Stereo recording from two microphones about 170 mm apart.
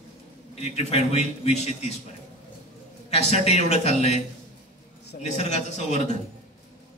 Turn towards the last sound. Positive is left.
turn(degrees=40)  # may be behind; listen again after turning